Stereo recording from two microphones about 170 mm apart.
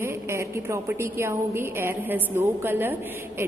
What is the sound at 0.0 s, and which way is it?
A woman's voice, 15° right (ahead or behind).